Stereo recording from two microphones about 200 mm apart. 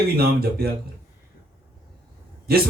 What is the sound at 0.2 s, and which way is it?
Speech, 50° right (ahead or behind).